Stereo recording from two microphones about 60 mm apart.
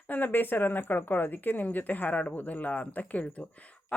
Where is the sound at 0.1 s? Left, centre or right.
Left.